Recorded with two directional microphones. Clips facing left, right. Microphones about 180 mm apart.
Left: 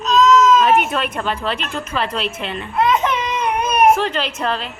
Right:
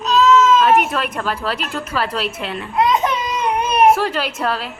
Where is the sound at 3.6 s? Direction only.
30° right (ahead or behind).